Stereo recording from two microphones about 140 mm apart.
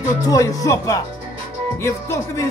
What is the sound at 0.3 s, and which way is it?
Speech, 25° left (ahead or behind).